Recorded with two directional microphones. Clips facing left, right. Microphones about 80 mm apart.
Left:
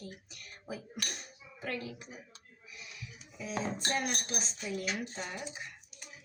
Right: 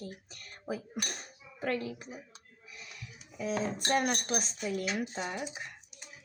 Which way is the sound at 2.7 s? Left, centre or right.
Right.